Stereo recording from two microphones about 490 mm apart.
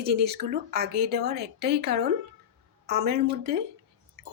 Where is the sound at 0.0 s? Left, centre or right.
Centre.